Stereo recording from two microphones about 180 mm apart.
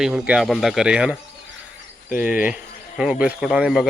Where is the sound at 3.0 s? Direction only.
5° right (ahead or behind).